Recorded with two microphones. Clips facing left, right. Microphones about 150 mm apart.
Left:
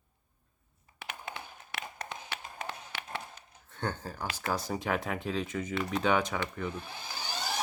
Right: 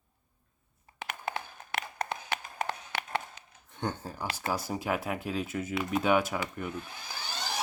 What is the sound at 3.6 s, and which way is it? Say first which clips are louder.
Speech: right 1 dB; 15° right (ahead or behind).